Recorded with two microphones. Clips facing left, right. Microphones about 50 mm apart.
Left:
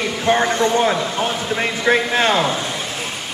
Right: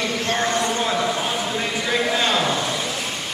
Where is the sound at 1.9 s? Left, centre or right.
Left.